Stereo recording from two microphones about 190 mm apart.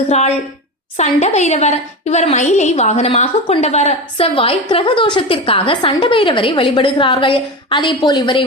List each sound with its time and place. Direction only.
0.1 s a woman's voice: 35° left (ahead or behind)